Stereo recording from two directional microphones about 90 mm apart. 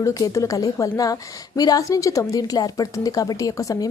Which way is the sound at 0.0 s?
35° left (ahead or behind).